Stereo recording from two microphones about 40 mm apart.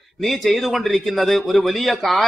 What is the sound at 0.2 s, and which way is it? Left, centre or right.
A man's voice, centre.